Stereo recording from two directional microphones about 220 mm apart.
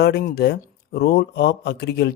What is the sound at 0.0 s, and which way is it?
Speech, 50° left (ahead or behind).